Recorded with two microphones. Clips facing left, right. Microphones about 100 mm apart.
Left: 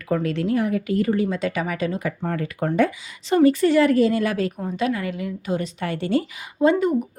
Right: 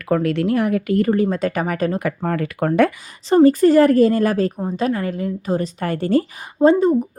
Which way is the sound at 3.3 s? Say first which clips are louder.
Right 4 dB; 40° right (ahead or behind).